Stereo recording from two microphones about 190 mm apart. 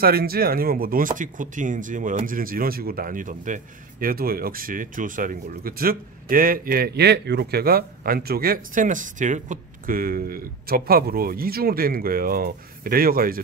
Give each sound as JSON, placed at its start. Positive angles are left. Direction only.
{"t": 0.0, "sound": "speech", "side_deg": -50}